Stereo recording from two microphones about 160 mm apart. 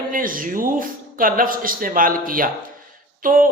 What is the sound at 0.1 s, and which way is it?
Speech, 60° right (ahead or behind).